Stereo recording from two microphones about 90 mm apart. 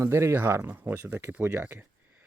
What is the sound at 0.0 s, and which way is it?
Speech, 30° right (ahead or behind).